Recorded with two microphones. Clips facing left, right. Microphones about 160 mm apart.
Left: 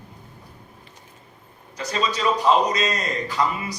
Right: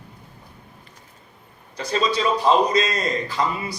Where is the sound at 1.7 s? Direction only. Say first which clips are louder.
Right 3 dB; 35° right (ahead or behind).